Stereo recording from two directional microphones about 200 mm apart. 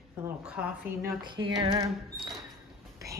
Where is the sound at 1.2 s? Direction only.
25° right (ahead or behind).